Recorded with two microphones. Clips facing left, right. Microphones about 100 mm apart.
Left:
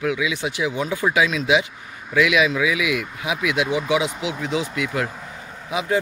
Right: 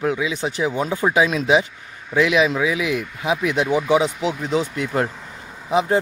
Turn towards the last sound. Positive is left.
turn(degrees=-35)  # may be behind; listen again after turning